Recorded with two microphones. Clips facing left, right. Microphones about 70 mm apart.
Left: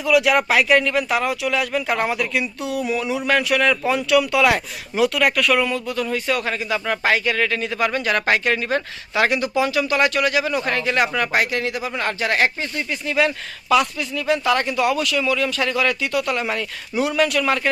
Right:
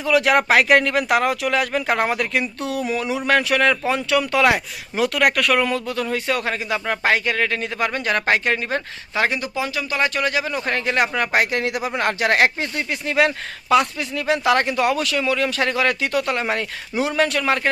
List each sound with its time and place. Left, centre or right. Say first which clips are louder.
0.0 s speech: even; right
6.7 s speech: left 1 dB; right
7.0 s speech: even; right
9.3 s speech: left 5 dB; right
13.7 s speech: right 1 dB; right
16.2 s speech: right 1 dB; right